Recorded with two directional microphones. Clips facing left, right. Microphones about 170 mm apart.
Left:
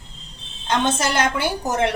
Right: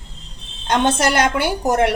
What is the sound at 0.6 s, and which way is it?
Speech, 65° right (ahead or behind).